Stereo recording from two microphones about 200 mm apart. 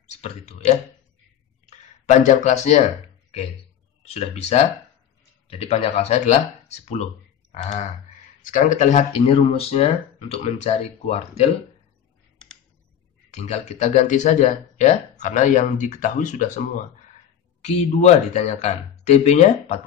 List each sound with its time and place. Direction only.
0.2 s speech: 30° left (ahead or behind)
1.7 s a sound: 35° left (ahead or behind)
4.0 s speech: 30° left (ahead or behind)
13.3 s speech: 35° left (ahead or behind)